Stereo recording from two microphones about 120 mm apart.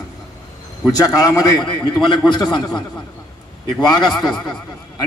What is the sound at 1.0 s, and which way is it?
A man's voice, 30° left (ahead or behind).